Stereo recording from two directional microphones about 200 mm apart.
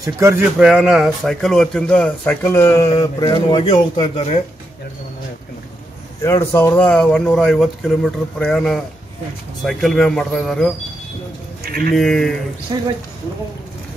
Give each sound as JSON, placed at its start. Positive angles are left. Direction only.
{"t": 0.0, "sound": "speech", "side_deg": -15}
{"t": 6.2, "sound": "speech", "side_deg": 15}
{"t": 11.6, "sound": "sheep", "side_deg": -50}
{"t": 11.9, "sound": "speech", "side_deg": 0}